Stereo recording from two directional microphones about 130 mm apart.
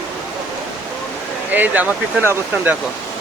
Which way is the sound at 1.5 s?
15° right (ahead or behind).